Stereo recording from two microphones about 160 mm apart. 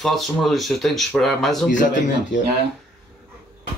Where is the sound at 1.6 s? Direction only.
55° left (ahead or behind).